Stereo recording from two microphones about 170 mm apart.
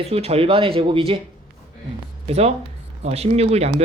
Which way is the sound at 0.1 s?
35° right (ahead or behind).